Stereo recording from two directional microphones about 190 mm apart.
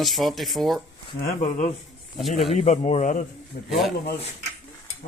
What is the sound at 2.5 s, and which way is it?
Speech, 35° left (ahead or behind).